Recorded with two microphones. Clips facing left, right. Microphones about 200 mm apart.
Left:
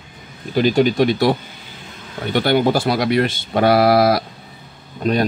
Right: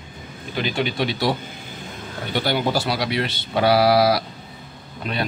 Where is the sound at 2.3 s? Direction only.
55° left (ahead or behind).